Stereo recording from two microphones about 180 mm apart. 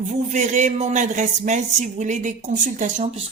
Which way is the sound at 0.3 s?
40° right (ahead or behind).